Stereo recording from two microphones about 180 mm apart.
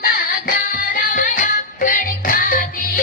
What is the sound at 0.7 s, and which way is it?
Music, 50° left (ahead or behind).